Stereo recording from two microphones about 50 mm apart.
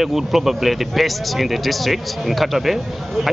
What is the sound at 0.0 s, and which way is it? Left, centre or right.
Speech, centre.